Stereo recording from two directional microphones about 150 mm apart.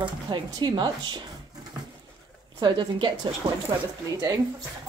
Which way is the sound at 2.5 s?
30° right (ahead or behind).